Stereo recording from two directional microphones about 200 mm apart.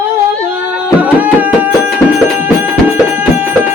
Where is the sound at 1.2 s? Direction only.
10° right (ahead or behind).